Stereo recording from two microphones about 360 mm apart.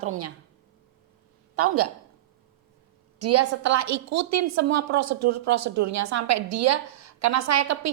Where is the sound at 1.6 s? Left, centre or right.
Right.